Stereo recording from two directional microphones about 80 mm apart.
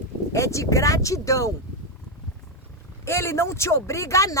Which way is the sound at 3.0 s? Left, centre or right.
Left.